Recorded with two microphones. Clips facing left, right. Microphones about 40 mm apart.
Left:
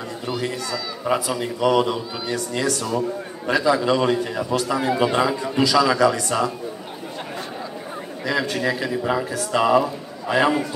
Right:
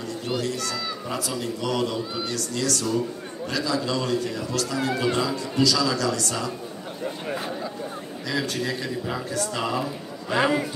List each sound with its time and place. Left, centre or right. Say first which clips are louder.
1.1 s speech: left 7 dB; left
8.3 s a man's voice: left 5 dB; centre
10.3 s a man's voice: left 3 dB; centre